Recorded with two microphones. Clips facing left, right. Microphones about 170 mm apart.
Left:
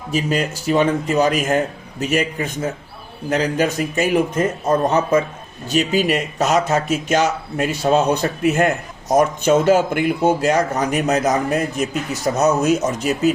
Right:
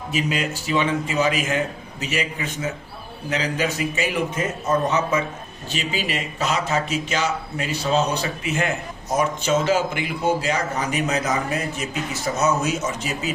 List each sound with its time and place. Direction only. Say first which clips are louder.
0.1 s a man's voice: left 4 dB; 45° left (ahead or behind)